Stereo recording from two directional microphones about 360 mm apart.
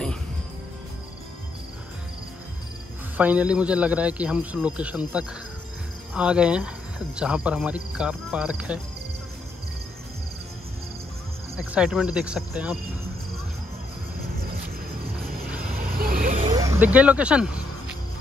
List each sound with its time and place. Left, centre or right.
3.2 s speech: centre
11.5 s speech: centre
15.8 s vehicle: right
16.5 s speech: centre